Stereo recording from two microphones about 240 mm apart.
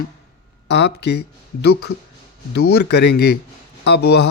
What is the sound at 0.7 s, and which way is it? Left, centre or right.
Speech, left.